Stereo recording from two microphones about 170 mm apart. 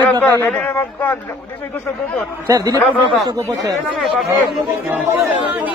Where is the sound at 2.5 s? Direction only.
20° right (ahead or behind).